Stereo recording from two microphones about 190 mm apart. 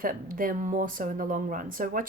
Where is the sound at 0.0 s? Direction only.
45° right (ahead or behind).